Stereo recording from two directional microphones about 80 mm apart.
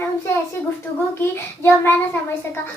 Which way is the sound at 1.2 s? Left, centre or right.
Left.